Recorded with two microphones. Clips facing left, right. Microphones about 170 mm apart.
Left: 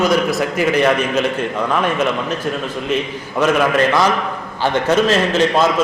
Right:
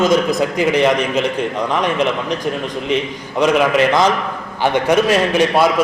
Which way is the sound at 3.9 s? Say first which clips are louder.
Right 1 dB; 15° right (ahead or behind).